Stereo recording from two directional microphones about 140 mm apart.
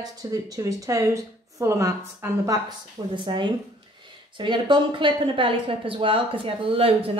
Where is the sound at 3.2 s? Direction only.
35° right (ahead or behind).